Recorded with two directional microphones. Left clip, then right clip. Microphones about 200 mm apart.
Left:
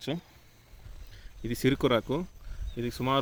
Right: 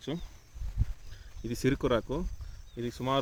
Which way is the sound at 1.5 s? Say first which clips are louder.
Left 3 dB; 20° left (ahead or behind).